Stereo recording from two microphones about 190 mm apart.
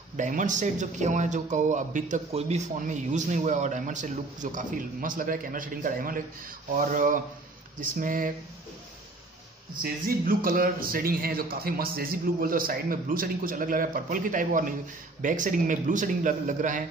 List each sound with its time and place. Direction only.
0.2 s a man's voice: 40° right (ahead or behind)
10.0 s a man's voice: 50° right (ahead or behind)